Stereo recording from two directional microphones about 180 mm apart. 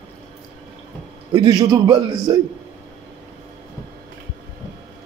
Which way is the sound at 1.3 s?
20° right (ahead or behind).